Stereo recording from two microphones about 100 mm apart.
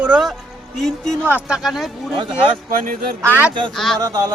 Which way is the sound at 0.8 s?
5° left (ahead or behind).